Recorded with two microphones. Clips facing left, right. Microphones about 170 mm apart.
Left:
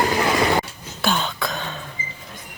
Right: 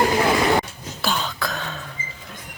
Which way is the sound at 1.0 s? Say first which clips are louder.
Left 2 dB; centre (ahead or behind).